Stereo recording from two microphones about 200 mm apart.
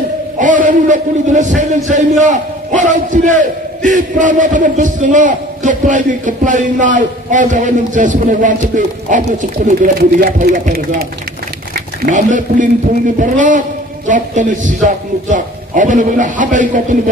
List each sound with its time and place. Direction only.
0.4 s a man's voice: 40° right (ahead or behind)
12.1 s a man's voice: 40° right (ahead or behind)